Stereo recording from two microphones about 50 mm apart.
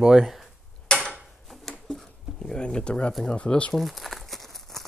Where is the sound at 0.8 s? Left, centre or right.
Centre.